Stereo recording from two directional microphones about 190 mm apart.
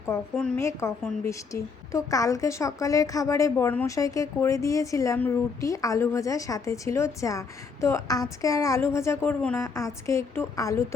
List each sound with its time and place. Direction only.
0.1 s a woman's voice: 10° left (ahead or behind)